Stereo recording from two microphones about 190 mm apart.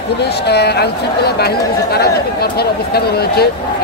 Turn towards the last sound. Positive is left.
turn(degrees=55)  # may be behind; listen again after turning